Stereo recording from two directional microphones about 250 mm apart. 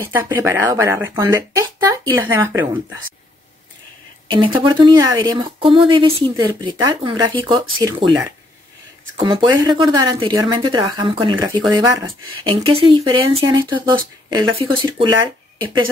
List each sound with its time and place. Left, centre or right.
0.0 s speech: centre
4.3 s speech: centre
9.2 s speech: centre